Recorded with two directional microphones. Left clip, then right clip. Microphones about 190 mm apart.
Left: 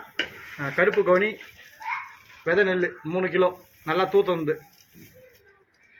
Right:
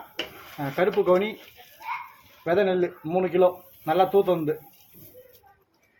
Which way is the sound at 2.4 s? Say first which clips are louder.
Left 1 dB; 65° right (ahead or behind).